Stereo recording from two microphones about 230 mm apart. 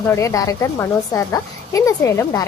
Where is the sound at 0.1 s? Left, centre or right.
Centre.